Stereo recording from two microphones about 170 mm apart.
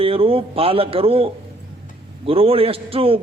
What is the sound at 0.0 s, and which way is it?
A man's voice, 35° right (ahead or behind).